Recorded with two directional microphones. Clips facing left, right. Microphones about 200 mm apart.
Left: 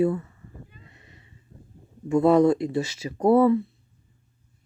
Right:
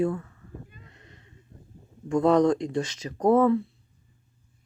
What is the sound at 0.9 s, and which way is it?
Neigh, 5° left (ahead or behind).